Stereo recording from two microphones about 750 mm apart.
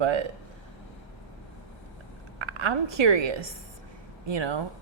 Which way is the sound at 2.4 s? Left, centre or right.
Right.